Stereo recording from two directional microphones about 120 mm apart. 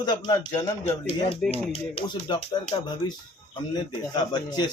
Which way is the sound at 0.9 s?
50° left (ahead or behind).